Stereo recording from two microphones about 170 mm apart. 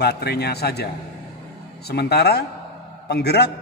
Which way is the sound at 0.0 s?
75° left (ahead or behind).